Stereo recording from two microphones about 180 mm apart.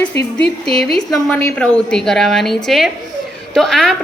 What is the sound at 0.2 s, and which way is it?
Speech, 65° left (ahead or behind).